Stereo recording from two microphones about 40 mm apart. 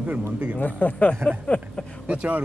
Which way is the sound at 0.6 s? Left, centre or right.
Left.